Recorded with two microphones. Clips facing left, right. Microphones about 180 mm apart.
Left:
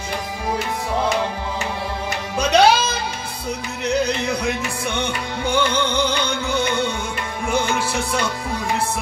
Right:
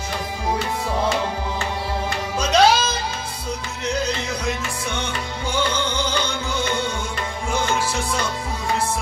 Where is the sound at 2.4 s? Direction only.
60° left (ahead or behind).